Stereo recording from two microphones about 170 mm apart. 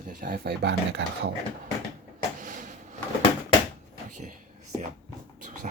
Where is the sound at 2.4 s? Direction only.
50° right (ahead or behind).